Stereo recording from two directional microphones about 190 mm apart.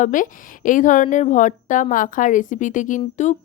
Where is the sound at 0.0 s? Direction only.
45° left (ahead or behind).